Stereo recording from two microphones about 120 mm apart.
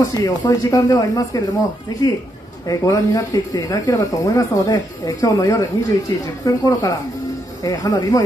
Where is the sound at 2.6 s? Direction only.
25° left (ahead or behind).